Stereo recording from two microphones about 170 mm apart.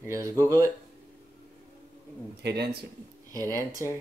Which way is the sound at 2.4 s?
75° right (ahead or behind).